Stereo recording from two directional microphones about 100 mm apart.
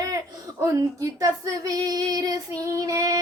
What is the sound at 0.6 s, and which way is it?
Female singing, 35° right (ahead or behind).